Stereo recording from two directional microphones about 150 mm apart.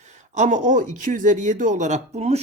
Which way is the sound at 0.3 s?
55° right (ahead or behind).